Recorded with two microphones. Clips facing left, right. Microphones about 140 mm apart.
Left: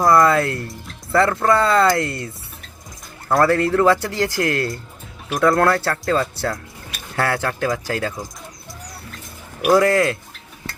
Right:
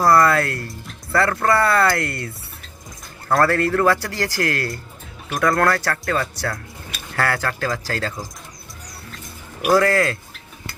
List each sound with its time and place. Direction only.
0.0 s speech: 20° left (ahead or behind)
3.3 s speech: 20° left (ahead or behind)
9.7 s speech: 20° left (ahead or behind)